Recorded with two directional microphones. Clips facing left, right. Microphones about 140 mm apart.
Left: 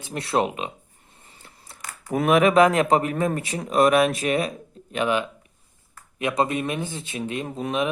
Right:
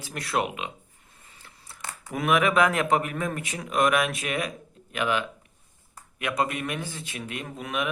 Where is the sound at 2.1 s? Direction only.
35° left (ahead or behind).